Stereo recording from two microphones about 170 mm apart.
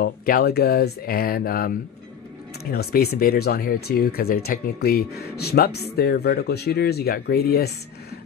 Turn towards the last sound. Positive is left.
turn(degrees=70)  # may be behind; listen again after turning